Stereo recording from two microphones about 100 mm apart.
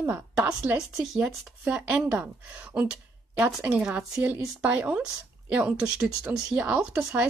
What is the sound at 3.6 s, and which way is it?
Speech, 15° right (ahead or behind).